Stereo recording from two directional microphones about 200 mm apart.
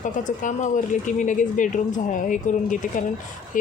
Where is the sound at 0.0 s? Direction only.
40° left (ahead or behind).